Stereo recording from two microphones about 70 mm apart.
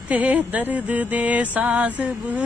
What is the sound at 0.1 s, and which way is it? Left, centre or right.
Mantra, right.